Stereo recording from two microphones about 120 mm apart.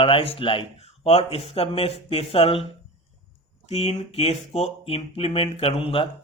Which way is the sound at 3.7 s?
60° left (ahead or behind).